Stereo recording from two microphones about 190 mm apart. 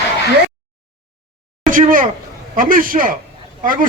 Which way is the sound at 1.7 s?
45° right (ahead or behind).